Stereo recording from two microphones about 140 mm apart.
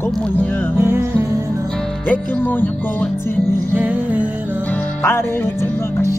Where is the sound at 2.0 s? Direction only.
10° left (ahead or behind).